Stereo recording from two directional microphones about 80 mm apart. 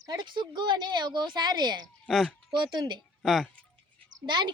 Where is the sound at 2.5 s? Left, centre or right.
Right.